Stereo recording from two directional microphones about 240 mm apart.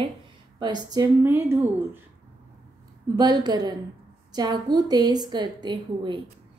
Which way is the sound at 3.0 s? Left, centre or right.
Centre.